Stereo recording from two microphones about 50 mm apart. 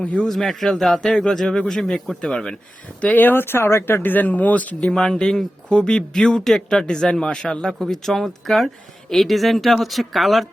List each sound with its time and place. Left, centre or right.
0.0 s a man's voice: left
0.3 s a woman's voice: centre
0.9 s speech: centre
3.2 s speech: left
4.0 s speech: left
4.8 s speech: centre
7.7 s a woman's voice: centre